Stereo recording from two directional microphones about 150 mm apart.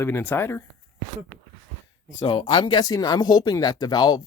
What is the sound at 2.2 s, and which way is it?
Speech, 35° left (ahead or behind).